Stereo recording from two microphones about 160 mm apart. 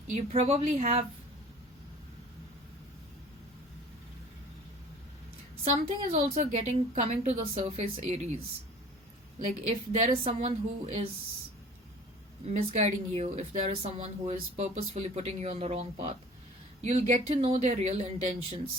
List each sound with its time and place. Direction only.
0.1 s a woman's voice: 40° right (ahead or behind)
5.6 s a woman's voice: 45° right (ahead or behind)
9.6 s a woman's voice: 45° right (ahead or behind)
12.5 s a woman's voice: 45° right (ahead or behind)